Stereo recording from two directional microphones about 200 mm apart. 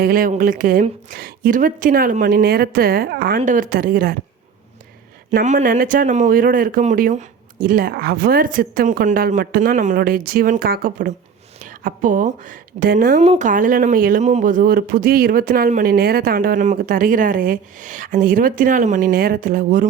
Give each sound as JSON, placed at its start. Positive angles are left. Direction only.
{"t": 0.0, "sound": "speech", "side_deg": -45}
{"t": 5.4, "sound": "speech", "side_deg": -40}